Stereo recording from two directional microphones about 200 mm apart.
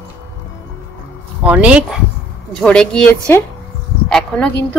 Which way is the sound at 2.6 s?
5° left (ahead or behind).